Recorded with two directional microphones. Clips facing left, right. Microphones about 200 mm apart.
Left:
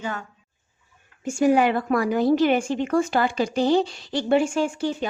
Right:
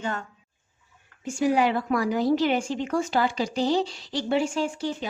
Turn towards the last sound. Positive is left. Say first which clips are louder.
# left 4 dB
turn(degrees=55)  # may be behind; listen again after turning